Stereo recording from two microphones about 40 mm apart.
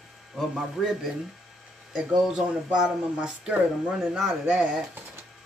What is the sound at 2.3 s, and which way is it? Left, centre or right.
Speech, right.